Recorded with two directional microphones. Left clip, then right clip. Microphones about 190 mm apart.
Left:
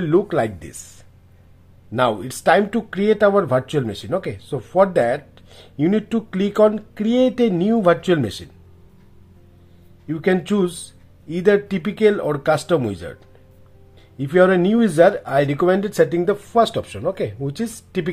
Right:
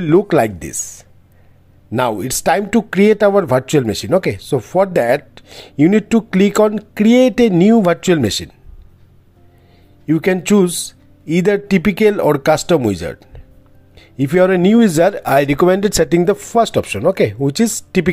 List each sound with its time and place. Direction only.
0.0 s speech: 40° right (ahead or behind)
1.9 s speech: 40° right (ahead or behind)
10.0 s speech: 40° right (ahead or behind)